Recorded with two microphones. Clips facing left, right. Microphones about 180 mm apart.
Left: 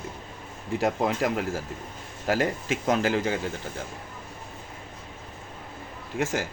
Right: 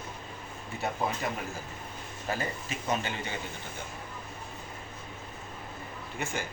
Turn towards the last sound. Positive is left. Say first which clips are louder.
# left 7 dB
turn(degrees=90)